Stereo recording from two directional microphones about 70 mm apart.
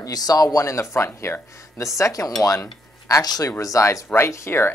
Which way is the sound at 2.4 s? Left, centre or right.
Left.